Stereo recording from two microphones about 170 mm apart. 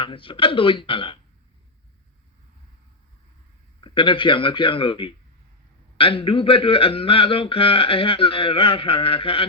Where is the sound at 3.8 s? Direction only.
30° left (ahead or behind).